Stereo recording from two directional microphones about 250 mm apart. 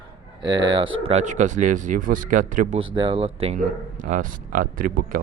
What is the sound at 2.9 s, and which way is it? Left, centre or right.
Speech, right.